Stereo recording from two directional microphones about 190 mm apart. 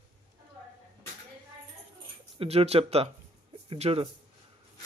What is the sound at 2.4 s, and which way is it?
Speech, 30° right (ahead or behind).